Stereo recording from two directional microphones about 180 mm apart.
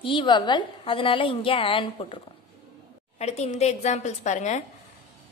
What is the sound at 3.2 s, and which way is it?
A woman's voice, 35° left (ahead or behind).